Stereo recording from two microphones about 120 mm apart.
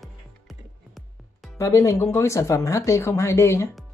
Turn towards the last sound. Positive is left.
turn(degrees=20)  # may be behind; listen again after turning